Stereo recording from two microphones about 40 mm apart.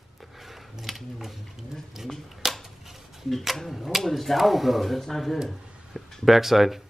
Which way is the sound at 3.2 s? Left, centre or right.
Centre.